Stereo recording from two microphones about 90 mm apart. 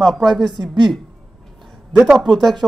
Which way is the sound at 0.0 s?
5° left (ahead or behind).